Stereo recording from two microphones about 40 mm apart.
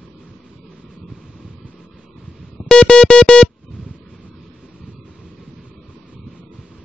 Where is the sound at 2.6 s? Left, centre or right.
Left.